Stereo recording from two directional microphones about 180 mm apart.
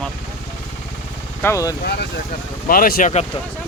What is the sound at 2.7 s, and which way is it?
Speech, 55° left (ahead or behind).